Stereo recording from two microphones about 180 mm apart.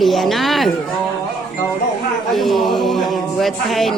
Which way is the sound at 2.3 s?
Centre (ahead or behind).